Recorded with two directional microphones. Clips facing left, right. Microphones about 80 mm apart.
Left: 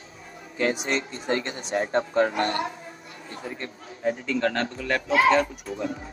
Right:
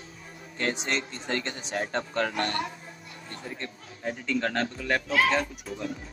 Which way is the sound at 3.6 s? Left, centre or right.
Centre.